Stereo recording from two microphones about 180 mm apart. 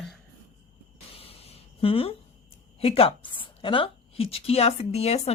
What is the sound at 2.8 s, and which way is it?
A woman's voice, 30° left (ahead or behind).